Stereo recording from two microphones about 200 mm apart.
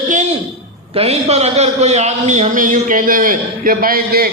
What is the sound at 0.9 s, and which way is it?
A man's voice, 30° right (ahead or behind).